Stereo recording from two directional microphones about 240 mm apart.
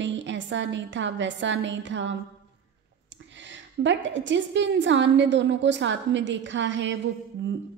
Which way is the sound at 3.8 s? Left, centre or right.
Right.